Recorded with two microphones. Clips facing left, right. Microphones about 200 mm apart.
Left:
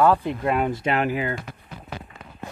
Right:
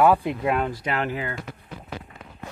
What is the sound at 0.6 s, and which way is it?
Speech, 20° left (ahead or behind).